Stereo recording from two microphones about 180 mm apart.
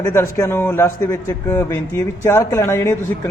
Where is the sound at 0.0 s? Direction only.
15° left (ahead or behind).